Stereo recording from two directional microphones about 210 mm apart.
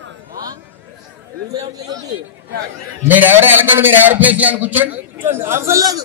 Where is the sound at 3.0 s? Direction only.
10° right (ahead or behind).